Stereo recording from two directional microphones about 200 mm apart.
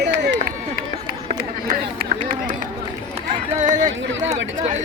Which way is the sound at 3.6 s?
40° right (ahead or behind).